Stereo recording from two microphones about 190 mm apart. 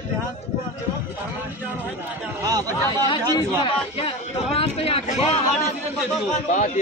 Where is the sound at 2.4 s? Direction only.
20° right (ahead or behind).